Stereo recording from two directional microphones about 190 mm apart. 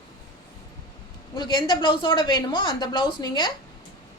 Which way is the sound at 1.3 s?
25° left (ahead or behind).